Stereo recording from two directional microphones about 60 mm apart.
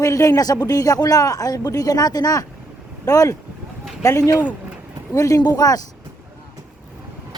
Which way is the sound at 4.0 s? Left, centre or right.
Left.